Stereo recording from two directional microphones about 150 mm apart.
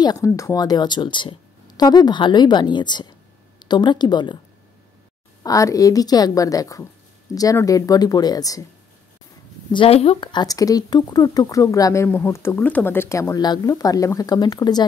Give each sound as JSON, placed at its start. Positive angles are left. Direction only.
{"t": 0.0, "sound": "speech", "side_deg": 25}
{"t": 5.4, "sound": "speech", "side_deg": 20}
{"t": 9.7, "sound": "speech", "side_deg": 35}